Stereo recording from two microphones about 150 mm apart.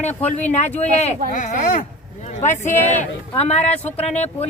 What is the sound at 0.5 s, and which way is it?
Speech, 50° left (ahead or behind).